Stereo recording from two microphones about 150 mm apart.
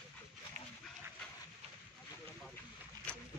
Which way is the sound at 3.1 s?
10° left (ahead or behind).